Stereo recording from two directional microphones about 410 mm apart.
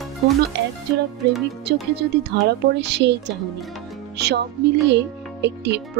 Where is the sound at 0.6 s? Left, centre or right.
Right.